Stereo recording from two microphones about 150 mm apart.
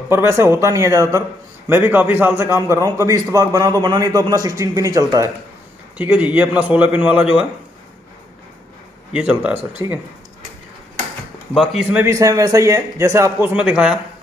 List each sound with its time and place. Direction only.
0.1 s a man's voice: 15° right (ahead or behind)
5.9 s a man's voice: 10° right (ahead or behind)
9.1 s a man's voice: 5° right (ahead or behind)
9.8 s a man's voice: 25° right (ahead or behind)
11.7 s a man's voice: 10° right (ahead or behind)
12.1 s a man's voice: 20° right (ahead or behind)